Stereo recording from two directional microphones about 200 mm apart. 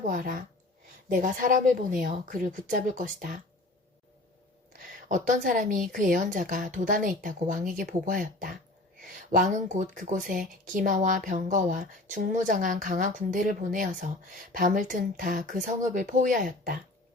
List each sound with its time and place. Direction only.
0.1 s a woman's voice: 40° right (ahead or behind)
5.0 s a woman's voice: 40° right (ahead or behind)